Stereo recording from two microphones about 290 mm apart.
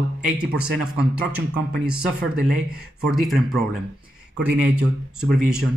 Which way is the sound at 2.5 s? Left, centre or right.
Right.